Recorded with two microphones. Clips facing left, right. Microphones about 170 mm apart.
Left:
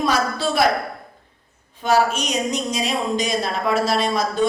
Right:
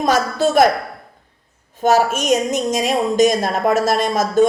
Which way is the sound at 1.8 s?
45° right (ahead or behind).